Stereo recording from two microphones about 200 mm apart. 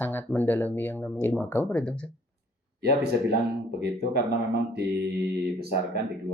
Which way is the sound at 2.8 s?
55° right (ahead or behind).